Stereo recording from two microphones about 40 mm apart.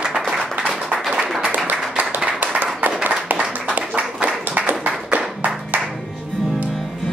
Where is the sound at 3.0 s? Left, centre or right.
Right.